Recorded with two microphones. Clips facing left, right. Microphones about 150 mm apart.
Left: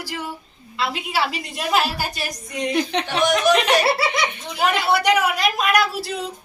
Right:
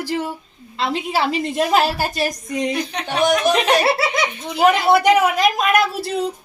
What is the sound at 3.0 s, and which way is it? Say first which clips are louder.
Speech: right 3 dB; 30° right (ahead or behind).